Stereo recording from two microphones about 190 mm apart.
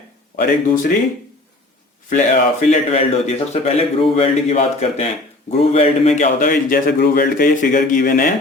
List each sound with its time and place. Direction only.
0.3 s a man's voice: 45° left (ahead or behind)
2.0 s a man's voice: 40° left (ahead or behind)